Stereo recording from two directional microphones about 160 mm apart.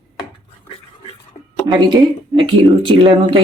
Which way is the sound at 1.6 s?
30° right (ahead or behind).